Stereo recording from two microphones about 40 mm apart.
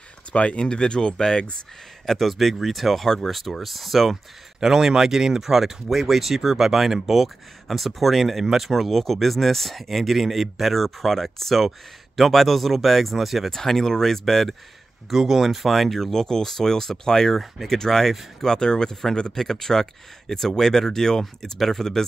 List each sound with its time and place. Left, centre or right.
0.3 s speech: left; by 1.4 s centre
2.0 s speech: centre
4.6 s speech: centre
13.6 s speech: centre
15.0 s speech: centre